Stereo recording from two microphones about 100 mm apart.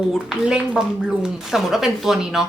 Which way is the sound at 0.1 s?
5° right (ahead or behind).